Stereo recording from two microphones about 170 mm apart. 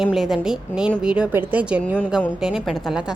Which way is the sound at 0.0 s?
Centre (ahead or behind).